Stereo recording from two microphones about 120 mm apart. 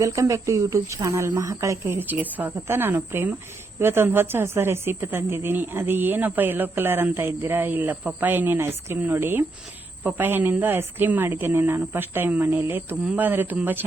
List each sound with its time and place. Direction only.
0.0 s a woman's voice: 25° right (ahead or behind)